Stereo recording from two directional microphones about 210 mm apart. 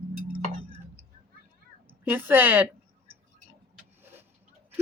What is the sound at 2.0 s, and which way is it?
Speech, 10° right (ahead or behind).